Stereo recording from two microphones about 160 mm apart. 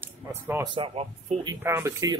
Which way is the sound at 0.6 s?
35° right (ahead or behind).